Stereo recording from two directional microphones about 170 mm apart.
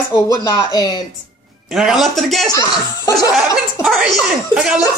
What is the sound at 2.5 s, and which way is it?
Speech, 20° left (ahead or behind).